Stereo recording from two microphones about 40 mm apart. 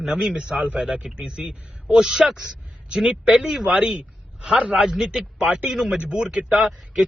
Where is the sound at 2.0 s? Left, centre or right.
Centre.